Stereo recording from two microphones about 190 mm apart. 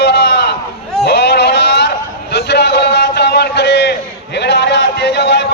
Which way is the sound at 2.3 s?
65° left (ahead or behind).